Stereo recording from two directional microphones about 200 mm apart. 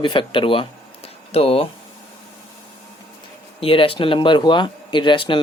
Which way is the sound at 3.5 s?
25° left (ahead or behind).